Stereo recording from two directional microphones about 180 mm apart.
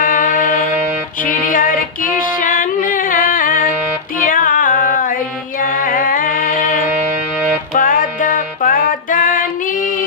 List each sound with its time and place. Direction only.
0.0 s music: 50° left (ahead or behind)
1.2 s female singing: 50° left (ahead or behind)
4.3 s music: 50° left (ahead or behind)